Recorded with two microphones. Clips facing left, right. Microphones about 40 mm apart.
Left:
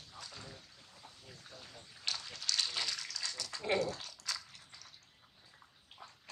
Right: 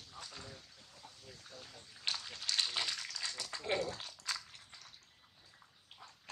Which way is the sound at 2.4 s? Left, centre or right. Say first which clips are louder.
Even; right.